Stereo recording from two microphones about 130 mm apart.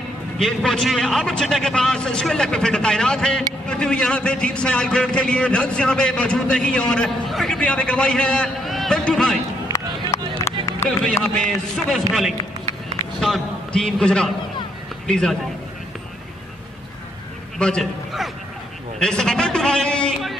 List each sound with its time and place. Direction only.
0.4 s a man's voice: centre (ahead or behind)
9.7 s run: 25° left (ahead or behind)
11.3 s a man's voice: 5° left (ahead or behind)
17.6 s a man's voice: 5° left (ahead or behind)
18.9 s a sound: 5° left (ahead or behind)